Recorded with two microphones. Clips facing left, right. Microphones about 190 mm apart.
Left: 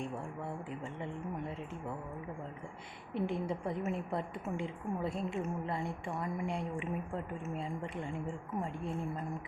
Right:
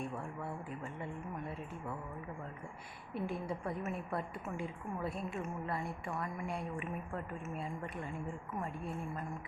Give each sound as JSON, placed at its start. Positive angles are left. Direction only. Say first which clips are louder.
{"t": 0.8, "sound": "speech", "louder": "left 2 dB", "side_deg": 20}
{"t": 3.2, "sound": "a woman's voice", "louder": "left 4 dB", "side_deg": 25}